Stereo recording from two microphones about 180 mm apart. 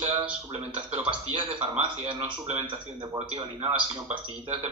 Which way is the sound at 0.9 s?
30° right (ahead or behind).